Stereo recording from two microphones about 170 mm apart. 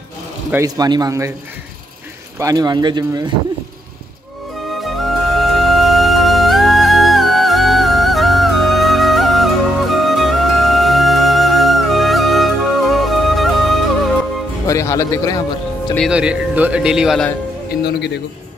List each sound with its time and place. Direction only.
0.5 s speech: 20° right (ahead or behind)
2.3 s speech: 20° right (ahead or behind)
4.8 s music: centre (ahead or behind)
14.7 s speech: 20° left (ahead or behind)
16.1 s speech: 5° right (ahead or behind)
17.8 s a man's voice: 80° left